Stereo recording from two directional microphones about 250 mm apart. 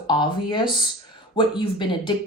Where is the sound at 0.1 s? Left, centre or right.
Centre.